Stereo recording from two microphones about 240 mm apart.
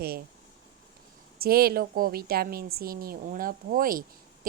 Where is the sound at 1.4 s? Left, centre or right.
Right.